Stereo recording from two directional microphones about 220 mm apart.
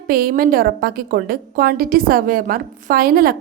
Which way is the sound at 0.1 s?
40° right (ahead or behind).